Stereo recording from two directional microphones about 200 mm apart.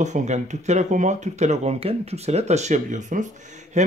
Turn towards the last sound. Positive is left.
turn(degrees=-35)  # may be behind; listen again after turning